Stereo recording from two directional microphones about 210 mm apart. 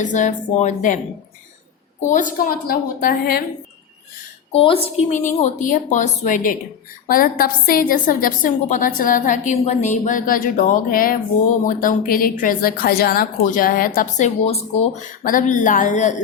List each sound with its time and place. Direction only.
0.0 s a woman's voice: 35° left (ahead or behind)
2.0 s a woman's voice: 35° left (ahead or behind)
4.5 s a woman's voice: 25° left (ahead or behind)